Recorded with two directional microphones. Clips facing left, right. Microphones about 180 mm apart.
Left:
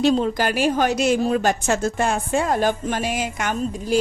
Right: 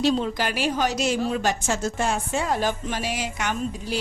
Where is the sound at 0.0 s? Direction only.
45° left (ahead or behind).